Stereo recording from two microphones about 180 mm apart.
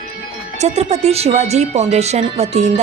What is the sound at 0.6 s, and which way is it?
A woman's voice, 35° right (ahead or behind).